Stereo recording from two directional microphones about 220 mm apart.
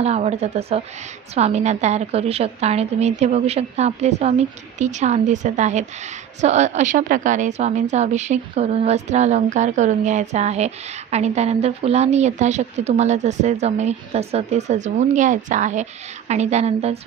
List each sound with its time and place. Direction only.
0.0 s a woman's voice: 30° right (ahead or behind)